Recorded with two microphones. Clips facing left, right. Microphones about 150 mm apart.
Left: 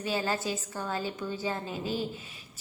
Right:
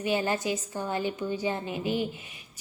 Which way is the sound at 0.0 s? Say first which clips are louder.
Right 3 dB; 20° right (ahead or behind).